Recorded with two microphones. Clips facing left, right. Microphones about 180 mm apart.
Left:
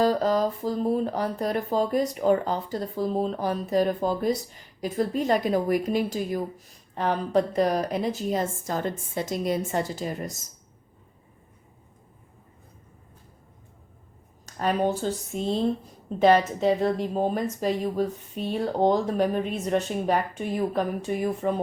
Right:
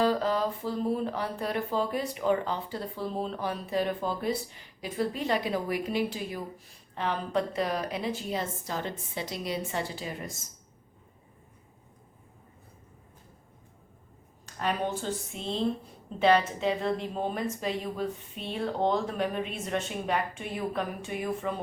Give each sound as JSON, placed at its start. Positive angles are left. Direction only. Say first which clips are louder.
{"t": 0.0, "sound": "speech", "louder": "left 4 dB", "side_deg": 40}
{"t": 14.4, "sound": "speech", "louder": "left 6 dB", "side_deg": 40}